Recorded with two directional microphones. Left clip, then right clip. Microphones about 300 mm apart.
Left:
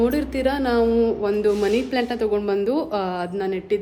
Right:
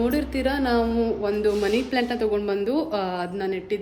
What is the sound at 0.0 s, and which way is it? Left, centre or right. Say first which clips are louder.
A woman's voice: left 3 dB; centre.